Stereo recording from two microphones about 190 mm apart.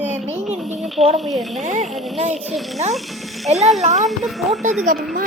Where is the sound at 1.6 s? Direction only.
40° right (ahead or behind).